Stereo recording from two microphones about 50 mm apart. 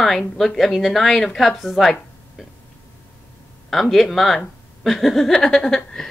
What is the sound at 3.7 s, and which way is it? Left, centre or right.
A woman's voice, centre.